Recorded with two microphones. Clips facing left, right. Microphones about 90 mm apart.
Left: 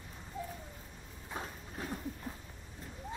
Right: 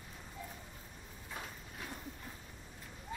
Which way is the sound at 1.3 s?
35° left (ahead or behind).